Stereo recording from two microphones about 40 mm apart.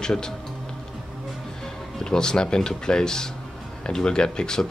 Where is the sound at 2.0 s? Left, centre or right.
Centre.